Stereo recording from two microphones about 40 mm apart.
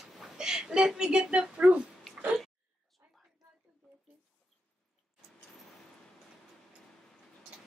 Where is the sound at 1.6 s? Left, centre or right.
Right.